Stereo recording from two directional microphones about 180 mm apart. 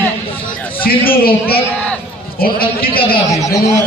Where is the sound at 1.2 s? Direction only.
60° left (ahead or behind).